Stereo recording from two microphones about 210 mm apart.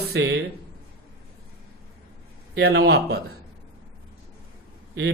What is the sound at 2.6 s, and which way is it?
Speech, 50° right (ahead or behind).